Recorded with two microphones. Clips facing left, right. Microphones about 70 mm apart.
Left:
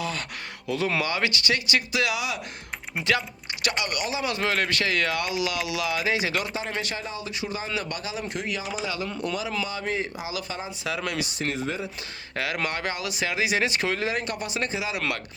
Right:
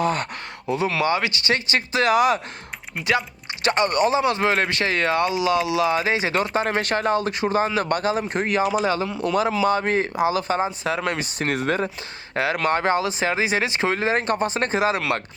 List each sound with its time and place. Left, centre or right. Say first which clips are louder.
0.0 s speech: right 9 dB; right
0.7 s speech: right 5 dB; right
3.1 s typing: right 4 dB; right
3.7 s speech: right 10 dB; right
6.6 s speech: right 9 dB; right
9.0 s speech: right 5 dB; centre
9.6 s speech: right 9 dB; right
11.3 s speech: right 6 dB; right
12.3 s speech: right 7 dB; right